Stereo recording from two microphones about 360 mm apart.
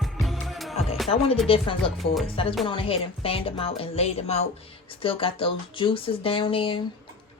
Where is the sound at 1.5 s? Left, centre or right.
Centre.